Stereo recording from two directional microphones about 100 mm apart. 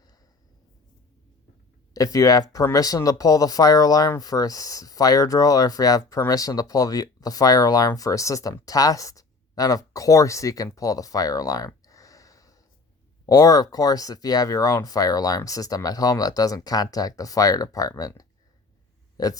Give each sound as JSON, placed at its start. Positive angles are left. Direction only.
{"t": 1.9, "sound": "speech", "side_deg": 35}
{"t": 19.1, "sound": "speech", "side_deg": 40}